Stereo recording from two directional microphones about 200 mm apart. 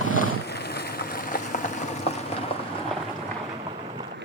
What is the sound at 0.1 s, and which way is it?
Vehicle, 50° left (ahead or behind).